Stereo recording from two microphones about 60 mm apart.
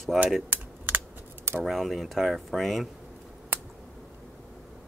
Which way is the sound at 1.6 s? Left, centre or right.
Centre.